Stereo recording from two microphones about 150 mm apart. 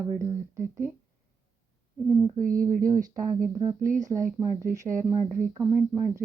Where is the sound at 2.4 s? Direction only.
65° right (ahead or behind).